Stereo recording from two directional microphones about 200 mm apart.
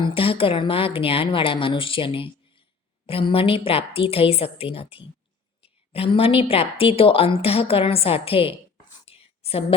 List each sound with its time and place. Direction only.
0.0 s speech: 25° left (ahead or behind)
9.0 s whispering: 30° left (ahead or behind)